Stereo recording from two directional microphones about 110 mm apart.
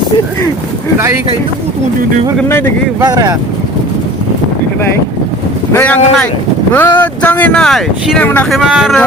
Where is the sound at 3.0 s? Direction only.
35° right (ahead or behind).